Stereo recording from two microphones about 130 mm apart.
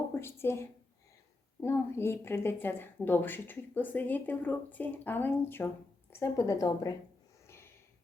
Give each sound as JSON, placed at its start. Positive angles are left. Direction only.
{"t": 0.2, "sound": "a woman's voice", "side_deg": 20}
{"t": 7.4, "sound": "snort", "side_deg": 20}